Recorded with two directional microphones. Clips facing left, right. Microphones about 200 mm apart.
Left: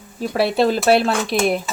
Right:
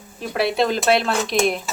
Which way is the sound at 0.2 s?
35° left (ahead or behind).